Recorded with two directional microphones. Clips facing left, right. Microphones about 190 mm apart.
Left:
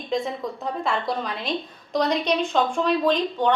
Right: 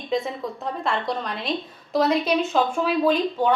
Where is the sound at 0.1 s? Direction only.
Centre (ahead or behind).